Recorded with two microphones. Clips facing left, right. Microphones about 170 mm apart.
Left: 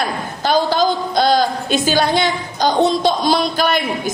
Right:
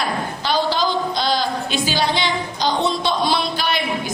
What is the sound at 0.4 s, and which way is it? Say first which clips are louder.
A woman's voice: left 5 dB; 45° left (ahead or behind).